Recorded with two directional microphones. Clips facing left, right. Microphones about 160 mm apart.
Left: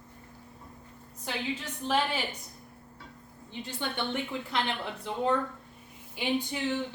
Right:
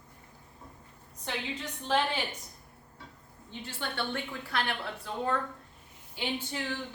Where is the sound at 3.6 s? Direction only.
20° left (ahead or behind).